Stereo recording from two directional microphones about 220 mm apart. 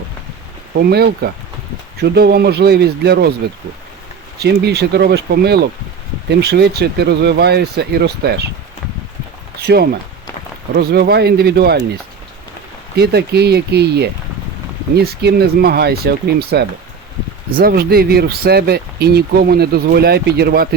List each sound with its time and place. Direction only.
0.7 s speech: 45° right (ahead or behind)
4.4 s speech: 50° right (ahead or behind)
9.7 s speech: 45° right (ahead or behind)
13.0 s speech: 45° right (ahead or behind)